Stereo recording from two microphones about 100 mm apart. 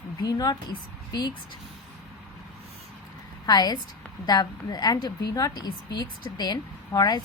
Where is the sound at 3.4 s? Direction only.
40° left (ahead or behind).